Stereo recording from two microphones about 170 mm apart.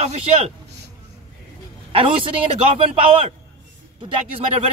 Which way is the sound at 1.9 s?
30° right (ahead or behind).